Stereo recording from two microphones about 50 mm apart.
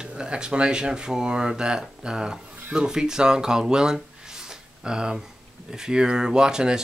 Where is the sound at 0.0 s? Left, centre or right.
Centre.